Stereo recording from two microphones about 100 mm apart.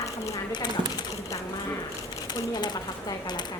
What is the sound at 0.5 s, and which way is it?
Speech, 45° left (ahead or behind).